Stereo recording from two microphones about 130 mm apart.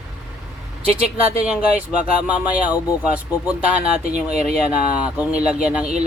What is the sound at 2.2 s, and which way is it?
Speech, 10° right (ahead or behind).